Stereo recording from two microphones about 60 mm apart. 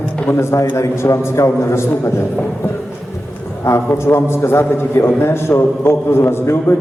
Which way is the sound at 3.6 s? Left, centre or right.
Left.